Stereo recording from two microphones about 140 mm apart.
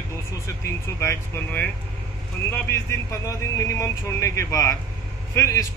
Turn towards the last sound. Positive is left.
turn(degrees=20)  # may be behind; listen again after turning